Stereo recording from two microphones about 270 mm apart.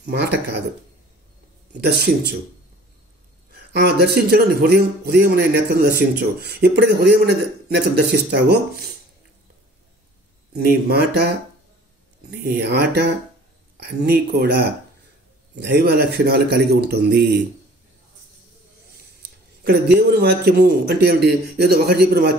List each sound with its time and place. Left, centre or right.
0.0 s a man's voice: right
1.8 s a man's voice: right
3.7 s a man's voice: right
10.5 s a man's voice: right
19.6 s a man's voice: right